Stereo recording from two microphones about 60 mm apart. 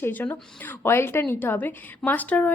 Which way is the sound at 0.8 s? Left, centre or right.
Left.